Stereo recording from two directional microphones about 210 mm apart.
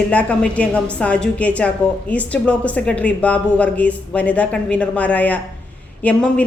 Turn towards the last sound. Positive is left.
turn(degrees=5)  # may be behind; listen again after turning